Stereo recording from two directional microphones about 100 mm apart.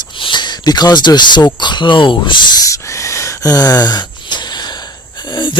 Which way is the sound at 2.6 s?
35° left (ahead or behind).